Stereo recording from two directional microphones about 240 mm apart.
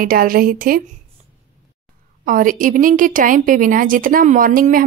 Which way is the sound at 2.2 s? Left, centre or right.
Right.